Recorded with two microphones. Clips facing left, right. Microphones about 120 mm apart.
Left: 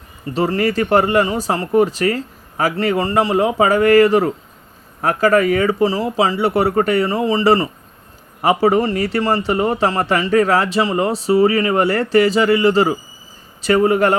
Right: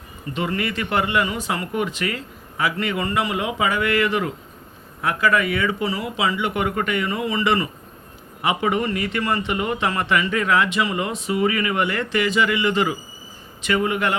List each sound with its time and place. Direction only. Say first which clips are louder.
0.3 s a man's voice: left 8 dB; 35° left (ahead or behind)